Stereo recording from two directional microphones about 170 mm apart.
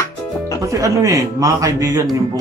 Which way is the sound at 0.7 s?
20° right (ahead or behind).